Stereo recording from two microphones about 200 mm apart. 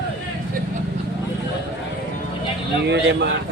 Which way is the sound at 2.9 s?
60° right (ahead or behind).